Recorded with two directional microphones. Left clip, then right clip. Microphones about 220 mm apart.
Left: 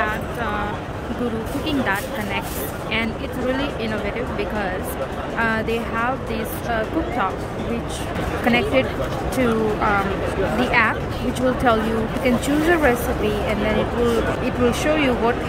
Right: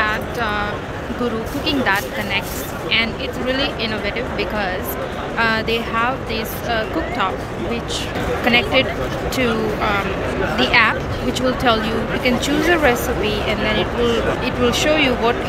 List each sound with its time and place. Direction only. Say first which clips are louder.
1.7 s speech: right 5 dB; 10° left (ahead or behind)
5.4 s speech: right 4 dB; 15° left (ahead or behind)
8.5 s speech: right 3 dB; 15° left (ahead or behind)